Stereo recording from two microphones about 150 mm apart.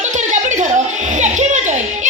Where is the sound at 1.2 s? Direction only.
50° right (ahead or behind).